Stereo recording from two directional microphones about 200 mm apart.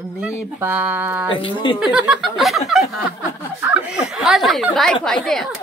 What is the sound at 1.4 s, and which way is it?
Speech, 25° left (ahead or behind).